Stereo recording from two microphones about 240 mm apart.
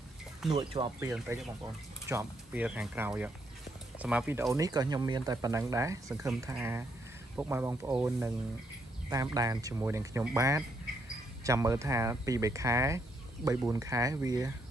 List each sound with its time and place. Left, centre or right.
0.5 s speech: right
0.9 s speech: centre